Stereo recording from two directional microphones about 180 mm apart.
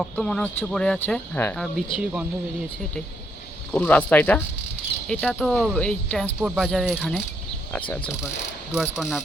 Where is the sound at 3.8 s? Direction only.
10° left (ahead or behind).